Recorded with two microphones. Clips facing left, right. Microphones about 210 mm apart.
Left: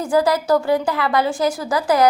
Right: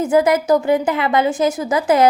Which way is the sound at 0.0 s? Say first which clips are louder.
Right 3 dB; 20° right (ahead or behind).